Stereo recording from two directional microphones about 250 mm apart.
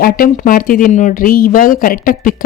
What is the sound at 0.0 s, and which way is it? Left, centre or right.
Speech, left.